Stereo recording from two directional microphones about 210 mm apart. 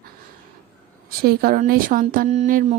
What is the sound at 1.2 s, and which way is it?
Speech, 45° right (ahead or behind).